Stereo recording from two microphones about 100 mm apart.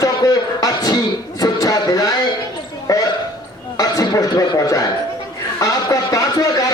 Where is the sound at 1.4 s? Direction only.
40° left (ahead or behind).